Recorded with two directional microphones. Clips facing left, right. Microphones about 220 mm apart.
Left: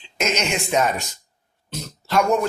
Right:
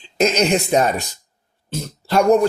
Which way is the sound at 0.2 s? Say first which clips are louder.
Right 7 dB; 35° right (ahead or behind).